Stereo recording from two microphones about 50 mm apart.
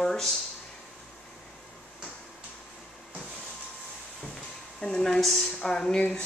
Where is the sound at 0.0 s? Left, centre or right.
Centre.